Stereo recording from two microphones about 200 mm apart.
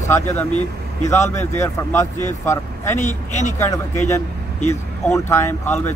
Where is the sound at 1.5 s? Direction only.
15° left (ahead or behind).